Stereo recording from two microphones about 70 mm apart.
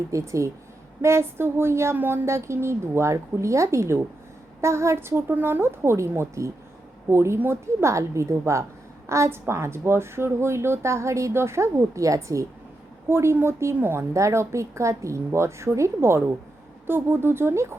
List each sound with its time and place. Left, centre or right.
0.1 s a woman's voice: right
13.1 s speech: right
14.1 s a woman's voice: right